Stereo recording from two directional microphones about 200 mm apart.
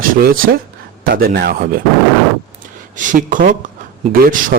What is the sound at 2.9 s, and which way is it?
A man's voice, 40° right (ahead or behind).